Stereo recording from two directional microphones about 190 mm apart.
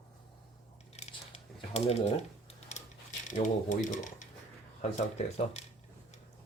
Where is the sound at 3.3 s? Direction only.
40° left (ahead or behind).